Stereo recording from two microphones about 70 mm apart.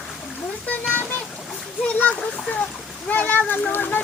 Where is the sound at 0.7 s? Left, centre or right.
Left.